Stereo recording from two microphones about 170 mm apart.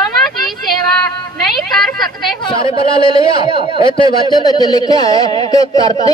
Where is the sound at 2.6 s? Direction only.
30° left (ahead or behind).